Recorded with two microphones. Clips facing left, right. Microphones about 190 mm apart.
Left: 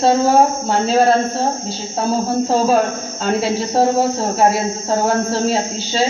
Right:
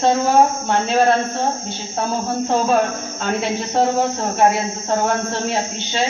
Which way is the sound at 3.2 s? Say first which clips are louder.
Left 4 dB; 35° left (ahead or behind).